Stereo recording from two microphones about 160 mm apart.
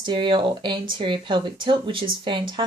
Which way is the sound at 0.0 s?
30° right (ahead or behind).